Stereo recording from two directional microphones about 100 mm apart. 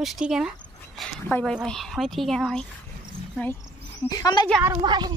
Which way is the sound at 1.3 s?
20° left (ahead or behind).